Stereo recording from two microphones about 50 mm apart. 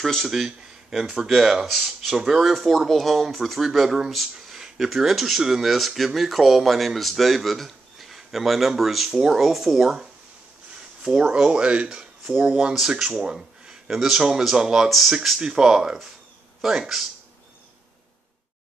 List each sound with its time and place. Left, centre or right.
0.0 s speech: centre
0.3 s speech: centre
11.0 s speech: centre
14.9 s speech: centre
15.4 s speech: centre